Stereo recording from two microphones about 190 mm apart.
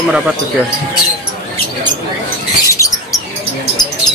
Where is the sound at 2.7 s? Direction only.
15° left (ahead or behind).